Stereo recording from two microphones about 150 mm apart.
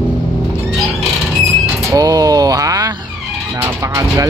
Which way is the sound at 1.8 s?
25° right (ahead or behind).